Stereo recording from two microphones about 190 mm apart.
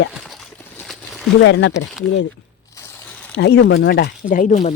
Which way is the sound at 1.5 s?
70° left (ahead or behind).